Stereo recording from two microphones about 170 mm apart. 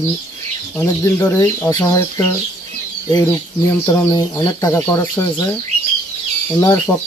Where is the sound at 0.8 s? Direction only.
15° left (ahead or behind).